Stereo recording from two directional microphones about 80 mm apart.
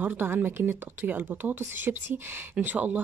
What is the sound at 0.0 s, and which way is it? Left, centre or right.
Speech, right.